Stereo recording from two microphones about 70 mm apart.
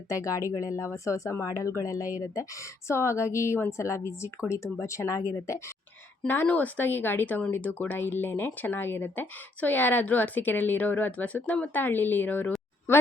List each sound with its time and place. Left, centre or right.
0.1 s a woman's voice: left
6.2 s speech: left